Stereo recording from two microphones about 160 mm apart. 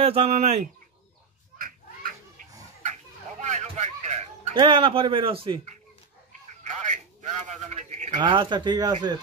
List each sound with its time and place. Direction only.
0.0 s speech: 40° right (ahead or behind)
2.8 s a sound: 45° right (ahead or behind)
6.7 s a man's voice: 50° right (ahead or behind)
8.2 s speech: 30° right (ahead or behind)